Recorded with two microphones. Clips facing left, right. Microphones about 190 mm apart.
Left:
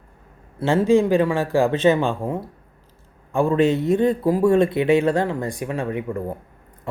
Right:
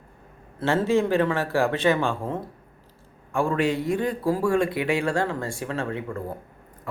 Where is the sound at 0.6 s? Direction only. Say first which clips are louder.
Left 5 dB; 15° left (ahead or behind).